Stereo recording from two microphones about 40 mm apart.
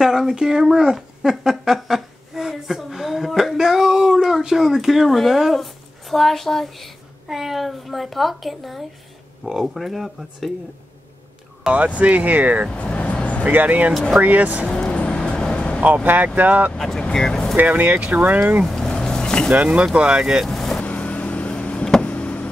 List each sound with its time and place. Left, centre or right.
0.0 s speech: centre
1.3 s a sound: centre
5.6 s a child's voice: centre
12.0 s speech: right
12.7 s vehicle: left
13.4 s speech: right
14.7 s music: left
15.8 s speech: right
16.7 s speech: centre
17.6 s speech: right
18.8 s vehicle: centre
20.0 s speech: right
20.5 s vehicle: centre
20.8 s vehicle: left